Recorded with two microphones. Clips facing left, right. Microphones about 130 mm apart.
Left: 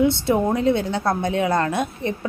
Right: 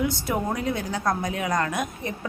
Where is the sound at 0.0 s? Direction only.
25° left (ahead or behind).